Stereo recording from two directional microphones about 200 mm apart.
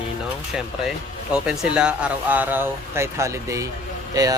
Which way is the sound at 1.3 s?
5° right (ahead or behind).